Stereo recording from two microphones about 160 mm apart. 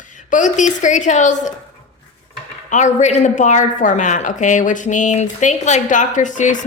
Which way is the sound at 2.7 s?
50° left (ahead or behind).